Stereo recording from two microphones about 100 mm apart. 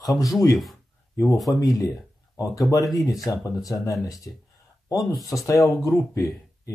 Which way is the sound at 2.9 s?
35° left (ahead or behind).